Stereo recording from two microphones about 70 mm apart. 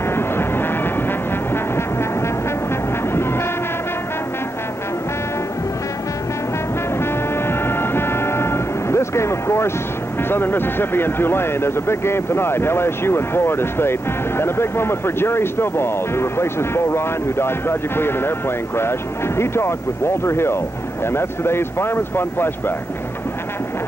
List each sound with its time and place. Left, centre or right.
0.1 s vehicle: left
7.0 s music: left
10.3 s speech: left